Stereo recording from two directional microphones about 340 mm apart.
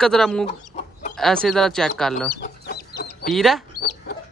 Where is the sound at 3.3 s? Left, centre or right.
Centre.